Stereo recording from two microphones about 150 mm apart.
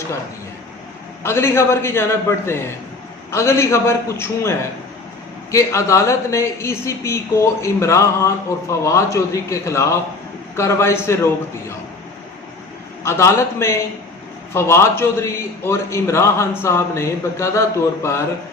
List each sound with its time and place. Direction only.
1.2 s a man's voice: 15° left (ahead or behind)
13.0 s a man's voice: 20° left (ahead or behind)